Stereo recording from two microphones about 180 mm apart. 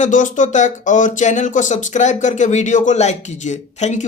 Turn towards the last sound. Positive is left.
turn(degrees=40)  # may be behind; listen again after turning